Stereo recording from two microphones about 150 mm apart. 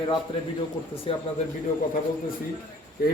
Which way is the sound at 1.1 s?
40° left (ahead or behind).